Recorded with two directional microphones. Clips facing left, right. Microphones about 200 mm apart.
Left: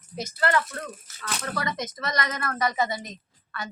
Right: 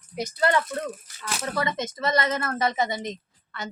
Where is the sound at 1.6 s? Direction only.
25° right (ahead or behind).